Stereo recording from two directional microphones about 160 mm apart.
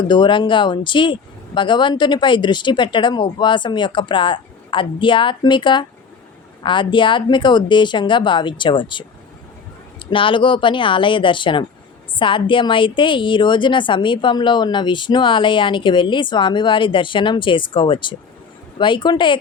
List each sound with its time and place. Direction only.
0.1 s speech: 30° left (ahead or behind)
10.1 s a woman's voice: 35° left (ahead or behind)